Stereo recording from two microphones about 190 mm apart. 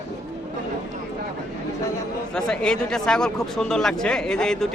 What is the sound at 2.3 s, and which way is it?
Speech, 5° left (ahead or behind).